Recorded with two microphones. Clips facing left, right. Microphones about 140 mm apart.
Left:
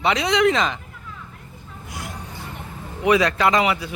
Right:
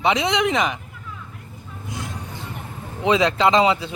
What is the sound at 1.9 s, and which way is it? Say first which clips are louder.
Music: right 2 dB; 20° right (ahead or behind).